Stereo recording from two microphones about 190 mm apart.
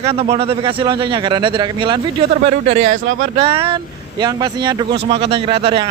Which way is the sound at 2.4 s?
35° right (ahead or behind).